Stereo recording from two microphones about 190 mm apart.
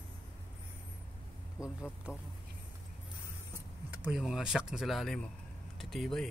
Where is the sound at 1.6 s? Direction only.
15° left (ahead or behind).